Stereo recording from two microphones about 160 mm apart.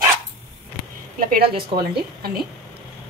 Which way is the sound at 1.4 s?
35° right (ahead or behind).